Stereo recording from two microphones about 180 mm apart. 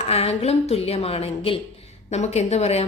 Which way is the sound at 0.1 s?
35° left (ahead or behind).